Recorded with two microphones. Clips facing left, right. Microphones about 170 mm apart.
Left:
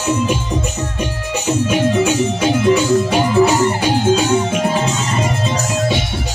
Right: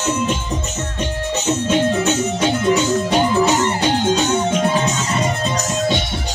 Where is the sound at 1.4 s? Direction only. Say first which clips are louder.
Left 2 dB; 10° left (ahead or behind).